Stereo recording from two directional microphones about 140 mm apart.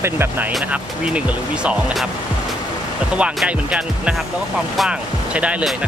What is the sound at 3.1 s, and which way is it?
Speech, 10° right (ahead or behind).